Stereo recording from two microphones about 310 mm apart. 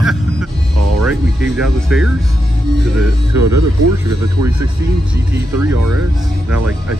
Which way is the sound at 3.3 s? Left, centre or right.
Right.